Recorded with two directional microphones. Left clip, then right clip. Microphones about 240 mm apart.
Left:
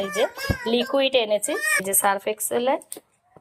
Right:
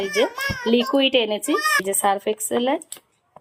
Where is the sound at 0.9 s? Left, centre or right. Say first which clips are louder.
Left 2 dB; centre.